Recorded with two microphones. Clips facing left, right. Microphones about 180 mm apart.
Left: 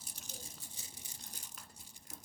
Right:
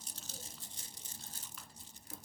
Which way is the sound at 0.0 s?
15° left (ahead or behind).